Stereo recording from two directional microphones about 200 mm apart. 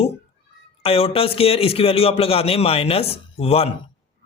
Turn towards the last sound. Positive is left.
turn(degrees=30)  # may be behind; listen again after turning